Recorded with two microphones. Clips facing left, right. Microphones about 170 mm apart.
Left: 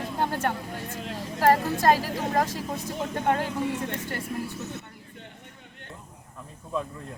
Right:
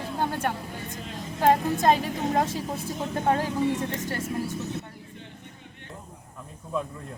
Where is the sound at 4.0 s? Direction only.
45° right (ahead or behind).